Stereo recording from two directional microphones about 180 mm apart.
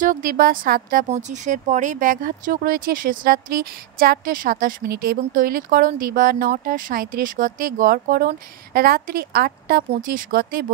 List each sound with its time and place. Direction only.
0.0 s speech: 50° right (ahead or behind)